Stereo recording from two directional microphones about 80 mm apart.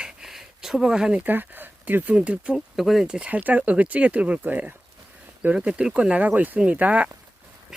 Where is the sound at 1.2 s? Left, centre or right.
Right.